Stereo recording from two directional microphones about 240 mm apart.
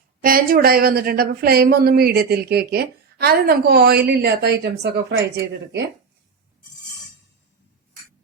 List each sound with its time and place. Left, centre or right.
0.2 s speech: right